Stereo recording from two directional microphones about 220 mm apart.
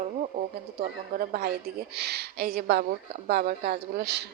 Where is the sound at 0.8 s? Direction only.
40° right (ahead or behind).